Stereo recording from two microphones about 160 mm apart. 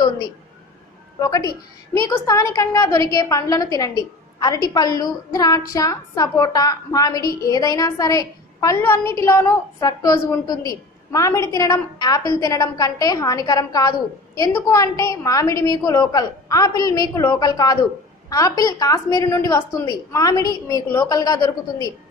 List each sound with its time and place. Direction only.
1.2 s a woman's voice: 25° left (ahead or behind)